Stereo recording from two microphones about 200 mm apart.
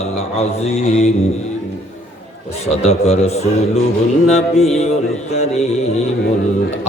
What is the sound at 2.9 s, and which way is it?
Mantra, 35° left (ahead or behind).